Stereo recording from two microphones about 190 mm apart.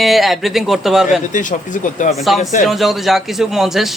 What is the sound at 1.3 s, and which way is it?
Speech, 40° left (ahead or behind).